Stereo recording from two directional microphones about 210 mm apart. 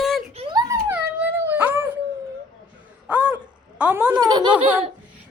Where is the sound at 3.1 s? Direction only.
5° right (ahead or behind).